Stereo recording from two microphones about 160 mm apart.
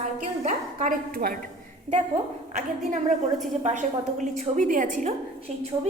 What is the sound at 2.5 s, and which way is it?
A woman's voice, 50° right (ahead or behind).